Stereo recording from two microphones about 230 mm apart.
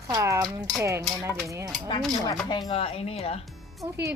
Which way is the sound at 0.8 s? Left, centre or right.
Centre.